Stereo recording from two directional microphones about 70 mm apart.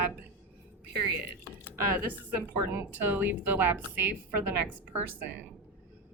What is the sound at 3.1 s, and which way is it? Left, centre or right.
Speech, right.